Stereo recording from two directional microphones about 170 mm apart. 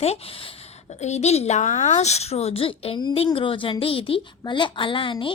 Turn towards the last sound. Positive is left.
turn(degrees=30)  # may be behind; listen again after turning